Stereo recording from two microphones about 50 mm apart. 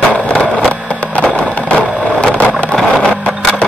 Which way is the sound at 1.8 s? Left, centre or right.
Left.